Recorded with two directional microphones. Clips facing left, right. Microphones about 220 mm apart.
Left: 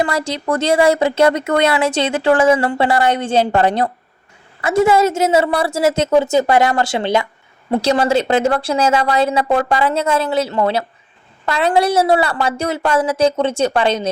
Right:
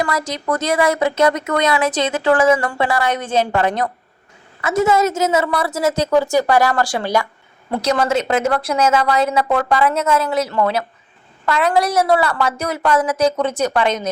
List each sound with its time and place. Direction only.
0.0 s speech: 30° left (ahead or behind)